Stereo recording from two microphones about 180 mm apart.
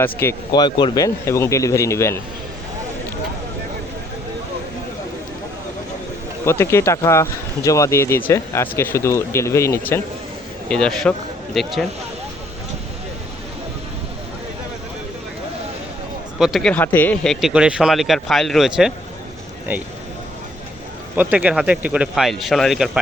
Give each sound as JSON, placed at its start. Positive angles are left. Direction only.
{"t": 0.0, "sound": "speech", "side_deg": 10}
{"t": 0.5, "sound": "speech", "side_deg": 25}
{"t": 6.4, "sound": "speech", "side_deg": 15}
{"t": 10.7, "sound": "speech", "side_deg": 5}
{"t": 16.4, "sound": "speech", "side_deg": 0}
{"t": 17.4, "sound": "speech", "side_deg": -5}
{"t": 21.2, "sound": "speech", "side_deg": -10}